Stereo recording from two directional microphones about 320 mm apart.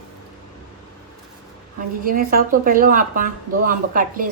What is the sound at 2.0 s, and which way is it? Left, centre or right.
Speech, right.